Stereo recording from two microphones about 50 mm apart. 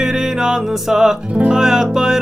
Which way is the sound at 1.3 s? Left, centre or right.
Right.